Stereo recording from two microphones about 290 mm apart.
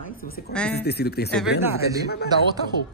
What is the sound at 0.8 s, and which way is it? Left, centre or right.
Speech, left.